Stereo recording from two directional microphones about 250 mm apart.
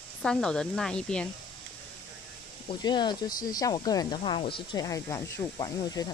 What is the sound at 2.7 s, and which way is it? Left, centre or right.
Speech, centre.